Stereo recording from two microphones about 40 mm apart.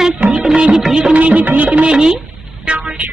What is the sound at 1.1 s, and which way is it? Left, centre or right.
Music, right.